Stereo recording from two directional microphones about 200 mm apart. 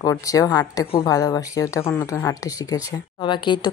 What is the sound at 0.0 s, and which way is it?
Speech, 15° left (ahead or behind).